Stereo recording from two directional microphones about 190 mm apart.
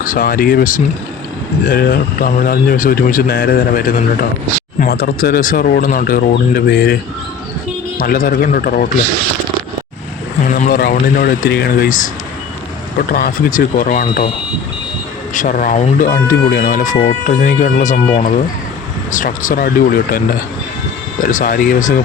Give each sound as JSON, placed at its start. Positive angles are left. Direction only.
{"t": 0.0, "sound": "speech", "side_deg": 45}
{"t": 10.5, "sound": "speech", "side_deg": 50}
{"t": 15.3, "sound": "speech", "side_deg": 45}